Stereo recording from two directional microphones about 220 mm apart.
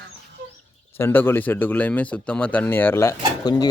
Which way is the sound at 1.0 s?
10° left (ahead or behind).